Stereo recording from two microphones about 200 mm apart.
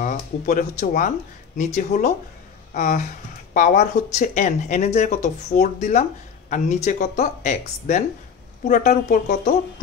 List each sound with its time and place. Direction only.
0.0 s speech: 40° left (ahead or behind)